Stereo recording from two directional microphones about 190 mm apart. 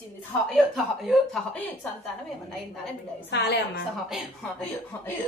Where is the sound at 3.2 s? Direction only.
60° left (ahead or behind).